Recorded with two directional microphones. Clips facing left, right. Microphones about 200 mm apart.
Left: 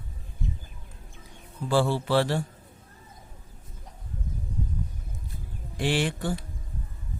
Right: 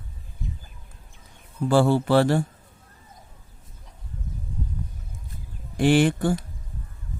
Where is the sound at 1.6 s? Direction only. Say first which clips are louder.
Right 5 dB; 50° right (ahead or behind).